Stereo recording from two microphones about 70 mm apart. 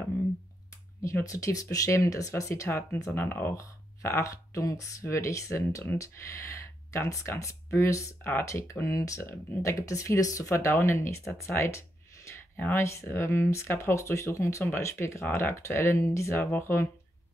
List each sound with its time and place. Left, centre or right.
1.2 s speech: left
3.2 s speech: left
4.2 s speech: left
8.2 s speech: left
8.5 s speech: left
12.5 s speech: left
12.8 s speech: left
15.2 s speech: left